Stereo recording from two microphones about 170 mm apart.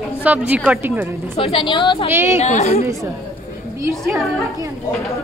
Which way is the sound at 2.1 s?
15° right (ahead or behind).